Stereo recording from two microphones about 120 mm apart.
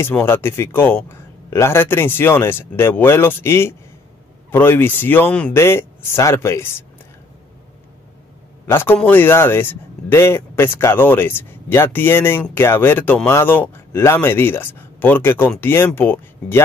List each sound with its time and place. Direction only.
0.0 s speech: 20° left (ahead or behind)
8.6 s speech: 20° left (ahead or behind)